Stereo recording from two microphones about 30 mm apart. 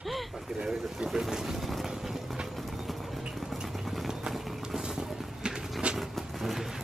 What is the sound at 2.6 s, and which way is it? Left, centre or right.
Vehicle, centre.